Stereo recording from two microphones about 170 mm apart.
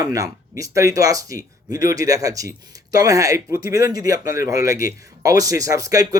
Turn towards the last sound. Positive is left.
turn(degrees=-20)  # may be behind; listen again after turning